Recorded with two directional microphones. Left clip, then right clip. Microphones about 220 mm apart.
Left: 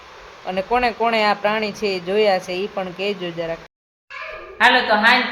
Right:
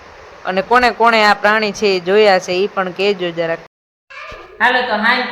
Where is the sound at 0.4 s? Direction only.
20° right (ahead or behind).